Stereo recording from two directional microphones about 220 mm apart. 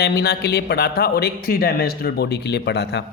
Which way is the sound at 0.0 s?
45° left (ahead or behind).